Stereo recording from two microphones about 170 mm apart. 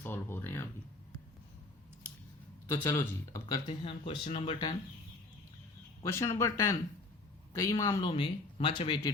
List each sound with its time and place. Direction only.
0.0 s a sound: 15° left (ahead or behind)
2.7 s speech: 15° left (ahead or behind)
3.7 s speech: 30° left (ahead or behind)
6.0 s speech: 15° left (ahead or behind)
8.0 s speech: 30° left (ahead or behind)